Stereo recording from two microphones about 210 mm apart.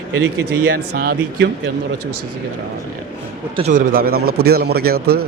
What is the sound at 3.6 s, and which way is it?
A man's voice, 40° right (ahead or behind).